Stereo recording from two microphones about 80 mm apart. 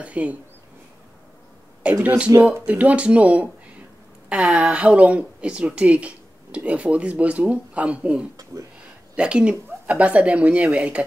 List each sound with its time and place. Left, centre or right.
0.0 s a woman's voice: centre
2.0 s speech: centre
2.6 s a woman's voice: centre